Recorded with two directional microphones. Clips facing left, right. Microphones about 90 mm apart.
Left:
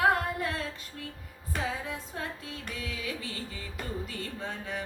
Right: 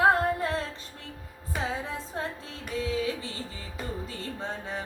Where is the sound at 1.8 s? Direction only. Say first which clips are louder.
Right 3 dB; 30° right (ahead or behind).